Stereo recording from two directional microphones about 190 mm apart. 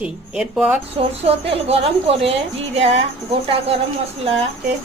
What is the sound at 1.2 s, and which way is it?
A woman's voice, 30° right (ahead or behind).